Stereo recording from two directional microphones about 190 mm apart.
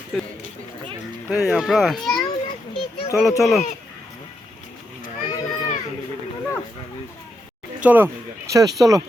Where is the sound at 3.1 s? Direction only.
Centre (ahead or behind).